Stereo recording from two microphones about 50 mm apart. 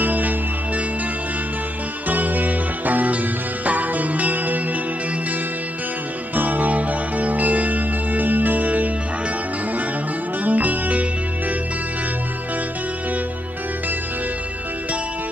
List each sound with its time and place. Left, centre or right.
0.0 s music: right
2.0 s music: right
6.3 s music: right
10.4 s music: right